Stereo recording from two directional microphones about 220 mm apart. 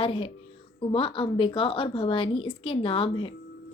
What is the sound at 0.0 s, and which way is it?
Speech, 25° left (ahead or behind).